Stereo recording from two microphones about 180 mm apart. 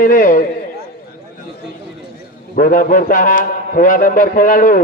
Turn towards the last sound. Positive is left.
turn(degrees=50)  # may be behind; listen again after turning